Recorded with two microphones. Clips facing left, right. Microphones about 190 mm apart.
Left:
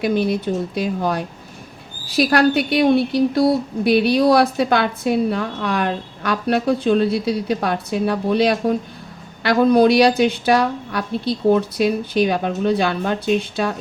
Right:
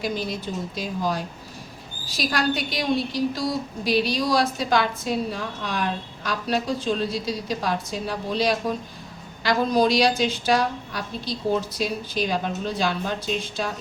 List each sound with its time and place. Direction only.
0.0 s a woman's voice: 60° left (ahead or behind)